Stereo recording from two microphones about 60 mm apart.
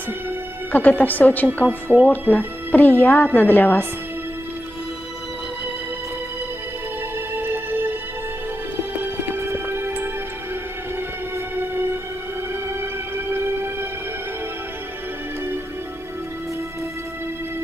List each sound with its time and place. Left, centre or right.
0.7 s speech: left
1.7 s speech: right
2.0 s a woman's voice: left
7.3 s music: right
8.9 s music: right
11.3 s music: right
13.3 s music: right